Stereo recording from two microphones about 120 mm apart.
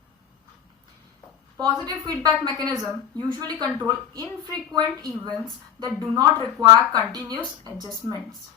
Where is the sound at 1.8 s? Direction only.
30° right (ahead or behind).